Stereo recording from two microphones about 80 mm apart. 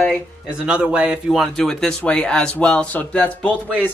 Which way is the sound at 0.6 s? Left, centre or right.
Centre.